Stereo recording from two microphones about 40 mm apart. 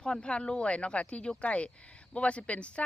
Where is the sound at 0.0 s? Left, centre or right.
Left.